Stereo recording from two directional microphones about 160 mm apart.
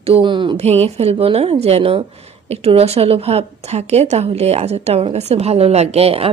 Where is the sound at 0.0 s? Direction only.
35° right (ahead or behind).